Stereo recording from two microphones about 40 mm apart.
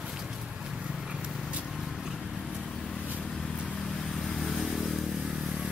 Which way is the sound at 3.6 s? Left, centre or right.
Centre.